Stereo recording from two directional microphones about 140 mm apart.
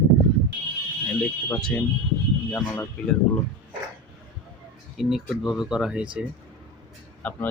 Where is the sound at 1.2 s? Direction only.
20° left (ahead or behind).